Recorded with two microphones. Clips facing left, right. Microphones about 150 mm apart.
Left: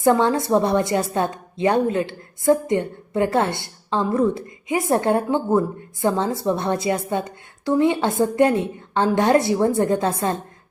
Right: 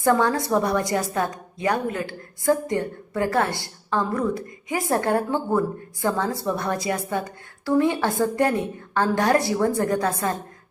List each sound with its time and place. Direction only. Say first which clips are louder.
0.0 s a woman's voice: left 3 dB; 20° left (ahead or behind)